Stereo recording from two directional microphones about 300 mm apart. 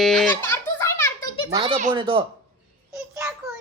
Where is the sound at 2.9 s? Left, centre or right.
Centre.